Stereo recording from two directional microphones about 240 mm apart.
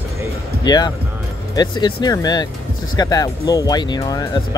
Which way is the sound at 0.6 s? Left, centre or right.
Centre.